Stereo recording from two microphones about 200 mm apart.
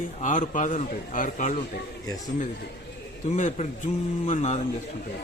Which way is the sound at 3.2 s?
35° left (ahead or behind).